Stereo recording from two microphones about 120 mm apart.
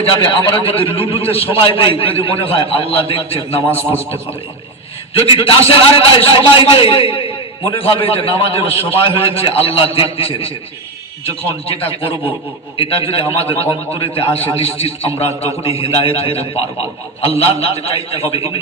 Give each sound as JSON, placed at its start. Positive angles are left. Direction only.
{"t": 0.0, "sound": "a man's voice", "side_deg": 50}
{"t": 5.1, "sound": "a man's voice", "side_deg": 50}